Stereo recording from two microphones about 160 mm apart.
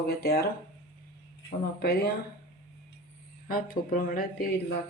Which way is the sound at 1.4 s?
80° left.